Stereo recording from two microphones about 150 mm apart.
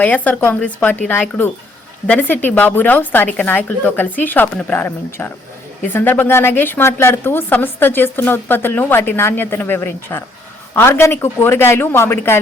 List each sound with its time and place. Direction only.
0.0 s a woman's voice: 10° left (ahead or behind)